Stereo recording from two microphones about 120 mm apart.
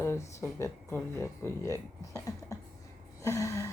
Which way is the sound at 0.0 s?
20° left (ahead or behind).